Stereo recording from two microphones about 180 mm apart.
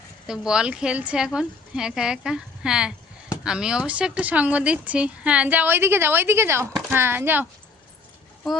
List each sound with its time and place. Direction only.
0.3 s a woman's voice: 5° right (ahead or behind)